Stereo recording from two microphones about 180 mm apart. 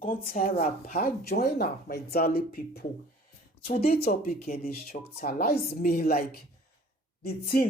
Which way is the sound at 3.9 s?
55° left (ahead or behind).